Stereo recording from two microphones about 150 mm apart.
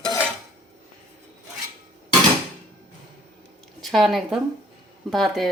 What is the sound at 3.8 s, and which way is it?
Speech, centre (ahead or behind).